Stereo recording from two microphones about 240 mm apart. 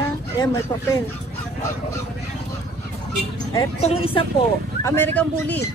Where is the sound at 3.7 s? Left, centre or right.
Left.